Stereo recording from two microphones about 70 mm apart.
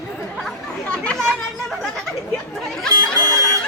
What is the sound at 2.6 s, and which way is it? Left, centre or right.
Speech, centre.